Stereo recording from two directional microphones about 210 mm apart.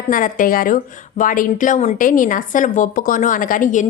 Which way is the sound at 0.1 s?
40° left (ahead or behind).